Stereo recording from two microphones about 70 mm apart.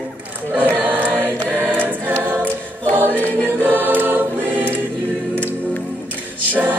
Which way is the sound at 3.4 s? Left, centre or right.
Right.